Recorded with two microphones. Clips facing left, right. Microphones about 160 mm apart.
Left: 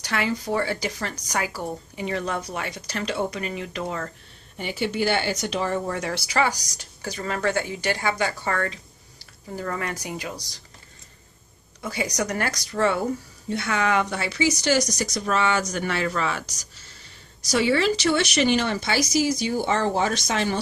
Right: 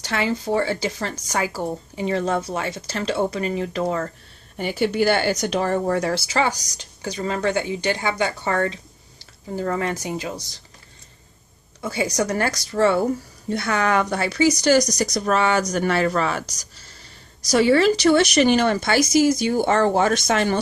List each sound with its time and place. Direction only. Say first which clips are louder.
0.0 s speech: right 3 dB; 25° right (ahead or behind)
4.6 s speech: right 5 dB; 45° right (ahead or behind); by 10.6 s 25° right (ahead or behind)
11.8 s speech: right 4 dB; 30° right (ahead or behind)
17.5 s speech: right 5 dB; 45° right (ahead or behind)